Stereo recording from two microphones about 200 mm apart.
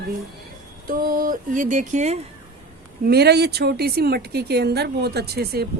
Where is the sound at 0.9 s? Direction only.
45° right (ahead or behind).